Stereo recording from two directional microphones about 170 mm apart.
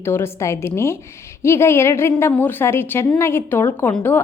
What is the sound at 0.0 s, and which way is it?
A woman's voice, 15° left (ahead or behind).